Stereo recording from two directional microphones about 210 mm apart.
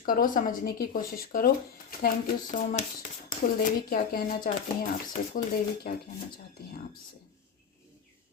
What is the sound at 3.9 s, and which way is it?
Speech, 40° left (ahead or behind).